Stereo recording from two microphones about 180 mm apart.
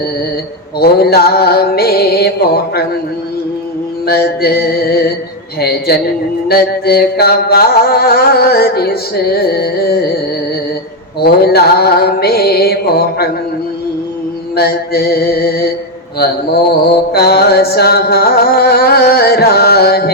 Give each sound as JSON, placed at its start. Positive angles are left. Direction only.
{"t": 0.8, "sound": "mantra", "side_deg": 60}
{"t": 4.0, "sound": "mantra", "side_deg": 60}
{"t": 11.2, "sound": "mantra", "side_deg": 60}
{"t": 14.5, "sound": "mantra", "side_deg": 60}